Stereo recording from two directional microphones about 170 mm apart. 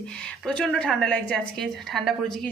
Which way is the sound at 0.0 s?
5° left (ahead or behind).